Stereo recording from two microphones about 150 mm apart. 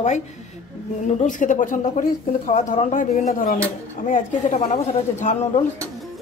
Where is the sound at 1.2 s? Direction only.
60° left (ahead or behind).